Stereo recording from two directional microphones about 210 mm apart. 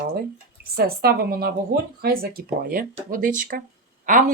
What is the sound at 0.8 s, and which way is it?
Speech, 45° right (ahead or behind).